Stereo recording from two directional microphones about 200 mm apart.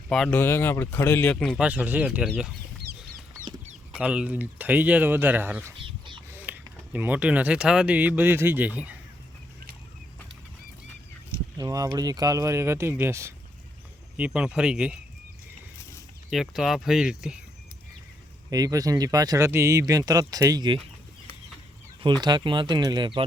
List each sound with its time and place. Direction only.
0.1 s speech: 5° left (ahead or behind)
1.6 s speech: 5° right (ahead or behind)
3.9 s speech: 5° right (ahead or behind)
5.7 s a sound: 25° right (ahead or behind)
6.3 s speech: 10° right (ahead or behind)
11.5 s speech: 15° right (ahead or behind)
16.3 s speech: centre (ahead or behind)
18.5 s speech: 20° right (ahead or behind)
22.0 s speech: 20° right (ahead or behind)